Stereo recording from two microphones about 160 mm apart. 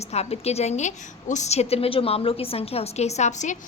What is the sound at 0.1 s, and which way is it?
A woman's voice, 40° left (ahead or behind).